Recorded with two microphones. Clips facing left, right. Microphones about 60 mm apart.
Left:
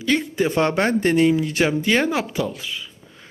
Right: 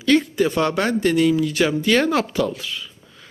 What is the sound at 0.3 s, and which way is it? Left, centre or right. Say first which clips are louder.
Speech: even; left.